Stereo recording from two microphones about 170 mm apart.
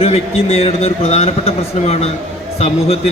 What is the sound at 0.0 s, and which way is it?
A man's voice, 35° left (ahead or behind).